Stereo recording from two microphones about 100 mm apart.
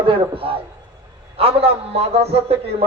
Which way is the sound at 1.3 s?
75° right (ahead or behind).